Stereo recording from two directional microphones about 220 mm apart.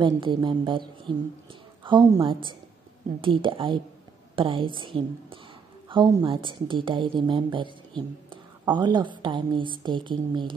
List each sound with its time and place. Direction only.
0.0 s a woman's voice: 20° right (ahead or behind)